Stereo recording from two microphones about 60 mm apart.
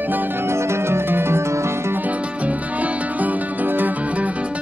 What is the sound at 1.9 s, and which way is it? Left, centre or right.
Music, right.